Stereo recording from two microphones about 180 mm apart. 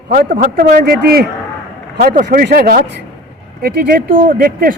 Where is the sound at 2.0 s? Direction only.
45° right (ahead or behind).